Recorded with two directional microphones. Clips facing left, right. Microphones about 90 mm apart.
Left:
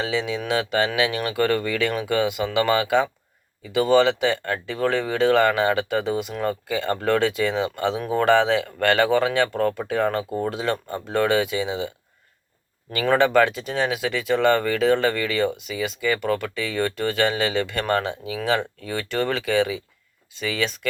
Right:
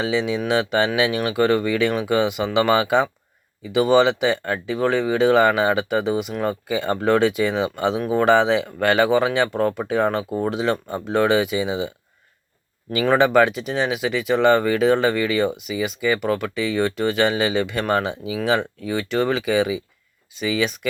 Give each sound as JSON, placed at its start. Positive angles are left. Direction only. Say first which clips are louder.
{"t": 0.0, "sound": "speech", "louder": "right 3 dB", "side_deg": -25}
{"t": 8.0, "sound": "speech", "louder": "right 2 dB", "side_deg": -10}
{"t": 12.9, "sound": "speech", "louder": "right 2 dB", "side_deg": -15}